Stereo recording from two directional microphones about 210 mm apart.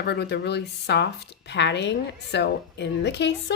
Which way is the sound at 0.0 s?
50° left (ahead or behind).